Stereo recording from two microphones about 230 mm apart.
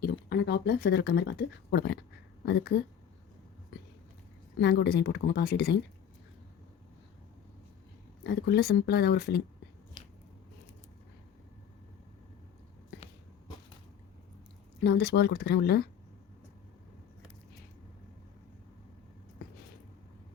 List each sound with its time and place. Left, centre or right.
0.0 s a woman's voice: left
4.6 s speech: left
8.2 s speech: left
14.8 s speech: left